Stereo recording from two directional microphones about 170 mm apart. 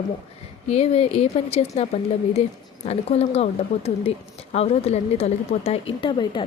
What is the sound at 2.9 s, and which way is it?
A woman's voice, 40° left (ahead or behind).